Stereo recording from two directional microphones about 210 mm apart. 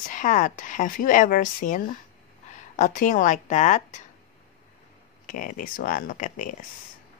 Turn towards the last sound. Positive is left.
turn(degrees=40)  # may be behind; listen again after turning